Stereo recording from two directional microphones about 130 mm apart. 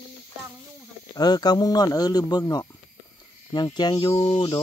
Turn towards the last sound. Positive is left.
turn(degrees=35)  # may be behind; listen again after turning